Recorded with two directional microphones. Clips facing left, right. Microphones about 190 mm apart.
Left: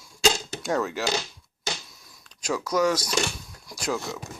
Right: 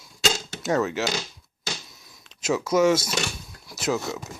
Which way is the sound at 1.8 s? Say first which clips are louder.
Right 2 dB; centre (ahead or behind).